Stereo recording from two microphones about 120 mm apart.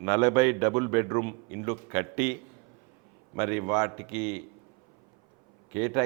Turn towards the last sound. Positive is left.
turn(degrees=-20)  # may be behind; listen again after turning